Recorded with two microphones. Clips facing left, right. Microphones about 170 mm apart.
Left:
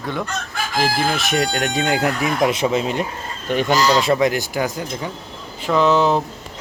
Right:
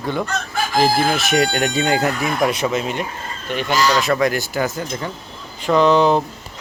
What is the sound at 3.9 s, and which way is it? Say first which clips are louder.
Speech: left 1 dB; 20° left (ahead or behind).